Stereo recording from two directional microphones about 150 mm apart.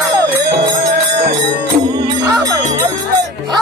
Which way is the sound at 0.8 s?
60° right (ahead or behind).